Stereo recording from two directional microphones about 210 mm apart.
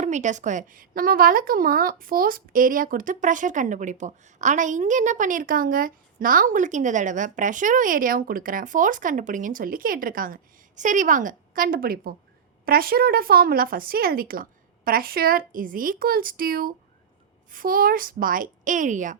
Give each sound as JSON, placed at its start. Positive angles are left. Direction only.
{"t": 0.0, "sound": "a woman's voice", "side_deg": -35}